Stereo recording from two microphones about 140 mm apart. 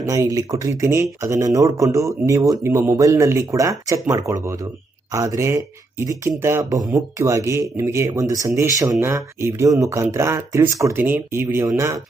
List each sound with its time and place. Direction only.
0.0 s speech: 25° right (ahead or behind)